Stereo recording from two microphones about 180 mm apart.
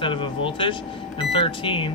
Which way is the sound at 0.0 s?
30° left (ahead or behind).